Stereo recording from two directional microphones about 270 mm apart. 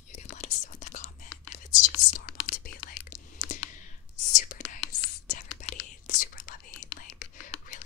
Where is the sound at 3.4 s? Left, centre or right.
Left.